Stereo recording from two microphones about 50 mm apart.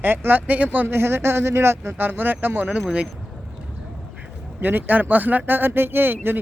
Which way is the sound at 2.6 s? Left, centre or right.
Right.